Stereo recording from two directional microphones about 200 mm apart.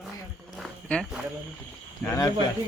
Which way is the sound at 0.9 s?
5° left (ahead or behind).